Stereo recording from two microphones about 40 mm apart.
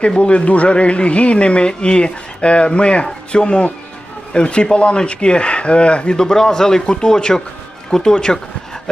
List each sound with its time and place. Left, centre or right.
0.2 s speech: left